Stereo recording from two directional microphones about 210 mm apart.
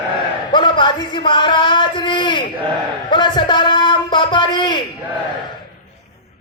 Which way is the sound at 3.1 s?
20° left (ahead or behind).